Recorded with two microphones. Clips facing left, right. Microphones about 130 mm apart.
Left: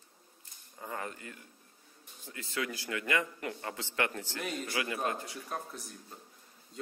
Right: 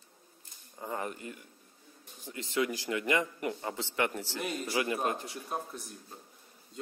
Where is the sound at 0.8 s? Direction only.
20° right (ahead or behind).